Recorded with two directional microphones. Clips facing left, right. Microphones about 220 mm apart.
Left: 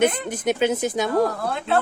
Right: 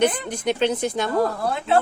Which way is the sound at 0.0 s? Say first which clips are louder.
Left 1 dB; 5° left (ahead or behind).